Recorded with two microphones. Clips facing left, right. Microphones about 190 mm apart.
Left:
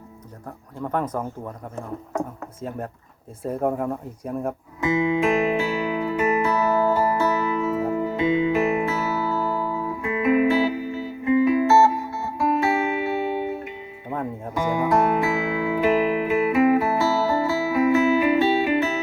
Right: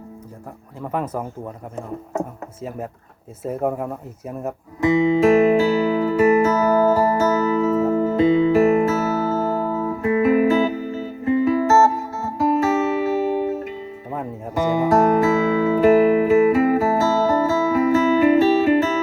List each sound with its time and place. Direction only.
0.8 s speech: 5° right (ahead or behind)
5.0 s music: 35° right (ahead or behind)